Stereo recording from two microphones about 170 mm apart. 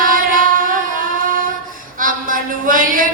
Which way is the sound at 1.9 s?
55° right (ahead or behind).